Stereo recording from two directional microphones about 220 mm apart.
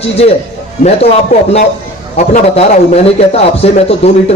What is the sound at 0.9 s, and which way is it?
A man's voice, 30° left (ahead or behind).